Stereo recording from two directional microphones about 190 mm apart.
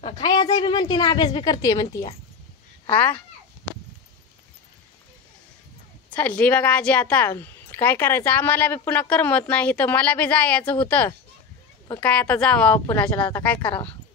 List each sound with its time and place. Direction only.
0.0 s a woman's voice: 25° left (ahead or behind)
2.9 s a woman's voice: 10° left (ahead or behind)
6.0 s a woman's voice: 10° left (ahead or behind)
13.6 s a woman's voice: 25° left (ahead or behind)